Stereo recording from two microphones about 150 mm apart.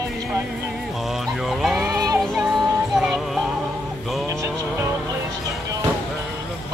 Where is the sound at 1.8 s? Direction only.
20° right (ahead or behind).